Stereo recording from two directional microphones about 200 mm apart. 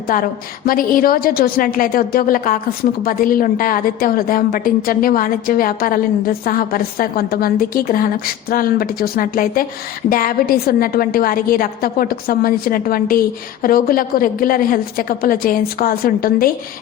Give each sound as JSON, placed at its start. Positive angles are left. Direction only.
{"t": 0.1, "sound": "a woman's voice", "side_deg": 45}